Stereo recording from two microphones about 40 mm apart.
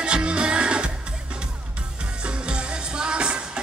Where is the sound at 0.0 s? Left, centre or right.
Right.